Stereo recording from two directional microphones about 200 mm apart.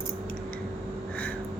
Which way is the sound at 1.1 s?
5° left (ahead or behind).